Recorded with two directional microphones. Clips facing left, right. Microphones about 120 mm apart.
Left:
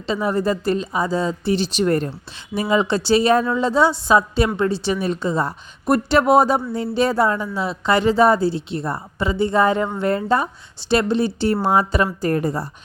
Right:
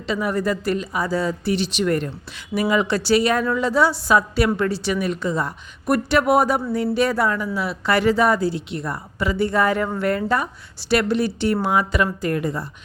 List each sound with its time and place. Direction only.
0.0 s a woman's voice: 30° left (ahead or behind)